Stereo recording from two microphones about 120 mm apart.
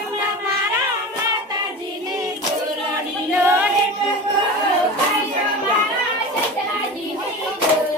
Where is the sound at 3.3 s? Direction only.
20° right (ahead or behind).